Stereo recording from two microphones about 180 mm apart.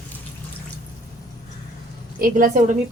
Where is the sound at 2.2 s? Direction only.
50° right (ahead or behind).